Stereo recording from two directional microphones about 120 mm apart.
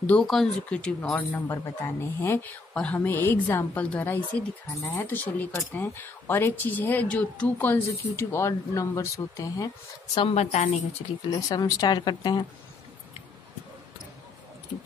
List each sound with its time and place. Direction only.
0.0 s speech: 10° left (ahead or behind)
1.5 s speech: 20° left (ahead or behind)
10.3 s a woman's voice: 65° left (ahead or behind)
11.2 s speech: 30° left (ahead or behind)